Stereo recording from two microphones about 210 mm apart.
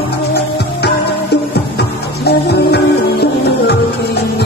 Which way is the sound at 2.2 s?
50° left (ahead or behind).